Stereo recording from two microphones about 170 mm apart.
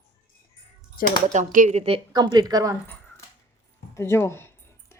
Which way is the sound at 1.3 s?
50° right (ahead or behind).